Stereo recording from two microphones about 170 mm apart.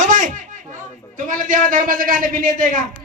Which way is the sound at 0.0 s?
45° right (ahead or behind).